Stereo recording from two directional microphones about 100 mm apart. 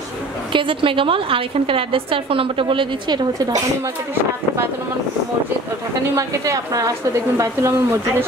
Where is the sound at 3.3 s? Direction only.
35° right (ahead or behind).